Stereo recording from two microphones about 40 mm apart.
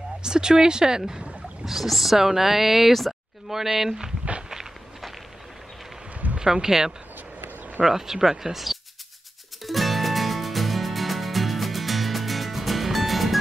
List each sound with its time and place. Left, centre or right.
0.2 s speech: centre
1.7 s speech: centre
4.2 s walk: right
6.4 s speech: centre
9.7 s music: centre